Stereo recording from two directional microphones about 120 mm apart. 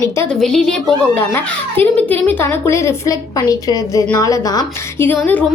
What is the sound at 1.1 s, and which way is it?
A child's voice, 15° left (ahead or behind).